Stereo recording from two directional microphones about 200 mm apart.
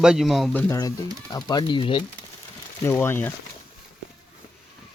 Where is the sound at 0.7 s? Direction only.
15° left (ahead or behind).